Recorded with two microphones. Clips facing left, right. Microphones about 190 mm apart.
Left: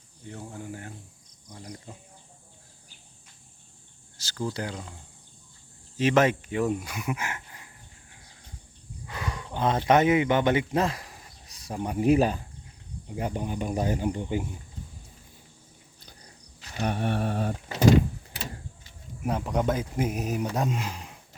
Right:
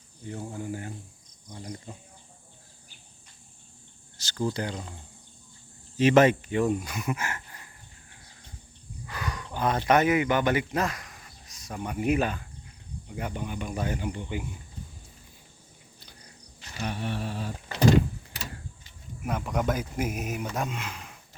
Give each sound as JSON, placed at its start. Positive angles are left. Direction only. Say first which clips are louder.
{"t": 0.3, "sound": "speech", "louder": "right 4 dB", "side_deg": -5}
{"t": 4.2, "sound": "speech", "louder": "right 2 dB", "side_deg": 5}
{"t": 6.0, "sound": "speech", "louder": "right 3 dB", "side_deg": 0}
{"t": 9.0, "sound": "wild animals", "louder": "even", "side_deg": 25}
{"t": 9.5, "sound": "speech", "louder": "left 1 dB", "side_deg": 25}
{"t": 16.8, "sound": "mantra", "louder": "left 5 dB", "side_deg": 55}
{"t": 19.2, "sound": "speech", "louder": "left 2 dB", "side_deg": 30}